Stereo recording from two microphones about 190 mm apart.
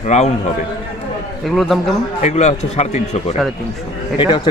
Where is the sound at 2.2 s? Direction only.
35° left (ahead or behind).